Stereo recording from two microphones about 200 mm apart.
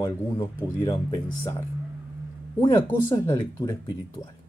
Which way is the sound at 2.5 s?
20° left (ahead or behind).